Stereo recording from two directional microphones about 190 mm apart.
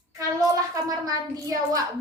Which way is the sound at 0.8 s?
20° right (ahead or behind).